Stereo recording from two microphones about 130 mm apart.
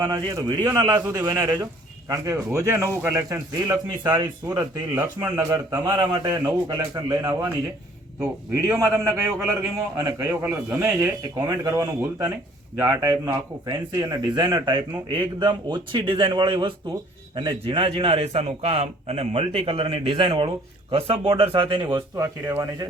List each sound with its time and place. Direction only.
0.0 s a man's voice: 30° right (ahead or behind)
22.1 s a man's voice: 25° right (ahead or behind)